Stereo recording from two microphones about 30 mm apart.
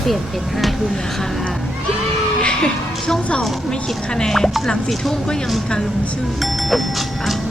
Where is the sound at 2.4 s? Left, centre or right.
Left.